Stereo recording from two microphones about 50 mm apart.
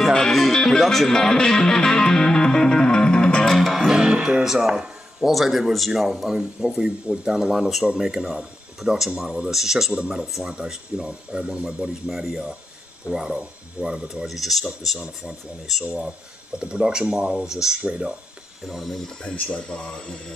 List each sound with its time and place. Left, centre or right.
0.3 s music: centre
3.4 s speech: centre
9.9 s speech: centre
12.1 s speech: centre
13.1 s speech: centre
14.2 s speech: centre
15.8 s speech: right
18.7 s speech: centre
19.5 s speech: centre